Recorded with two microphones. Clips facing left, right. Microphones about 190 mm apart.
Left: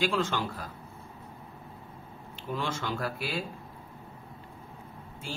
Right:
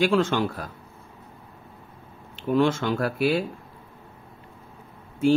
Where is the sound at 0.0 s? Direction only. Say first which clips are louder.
Right 8 dB; 60° right (ahead or behind).